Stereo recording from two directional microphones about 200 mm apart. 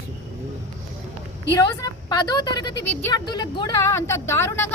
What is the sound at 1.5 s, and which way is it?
A woman's voice, 20° left (ahead or behind).